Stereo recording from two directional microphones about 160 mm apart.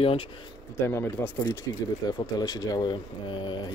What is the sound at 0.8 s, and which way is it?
Speech, 15° left (ahead or behind).